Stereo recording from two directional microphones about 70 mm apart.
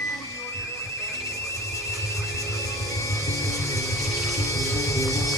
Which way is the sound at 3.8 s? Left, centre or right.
Left.